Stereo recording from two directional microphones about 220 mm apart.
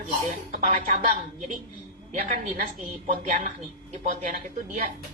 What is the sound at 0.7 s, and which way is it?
A woman's voice, 40° right (ahead or behind).